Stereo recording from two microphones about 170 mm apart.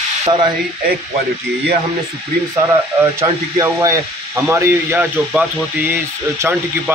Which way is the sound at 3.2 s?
20° right (ahead or behind).